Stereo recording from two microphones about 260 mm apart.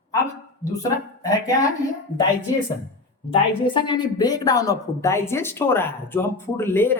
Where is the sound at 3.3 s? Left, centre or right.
Centre.